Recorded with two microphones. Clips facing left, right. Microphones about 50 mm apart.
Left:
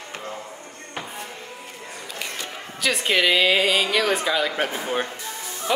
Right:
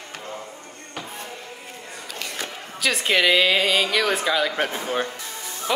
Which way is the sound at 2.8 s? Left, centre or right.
Centre.